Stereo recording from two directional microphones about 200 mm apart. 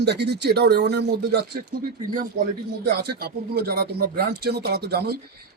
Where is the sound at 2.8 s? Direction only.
50° right (ahead or behind).